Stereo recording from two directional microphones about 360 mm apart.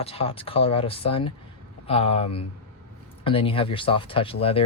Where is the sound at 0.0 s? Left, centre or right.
Centre.